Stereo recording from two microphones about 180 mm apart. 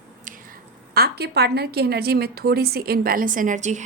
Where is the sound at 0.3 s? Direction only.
55° right (ahead or behind).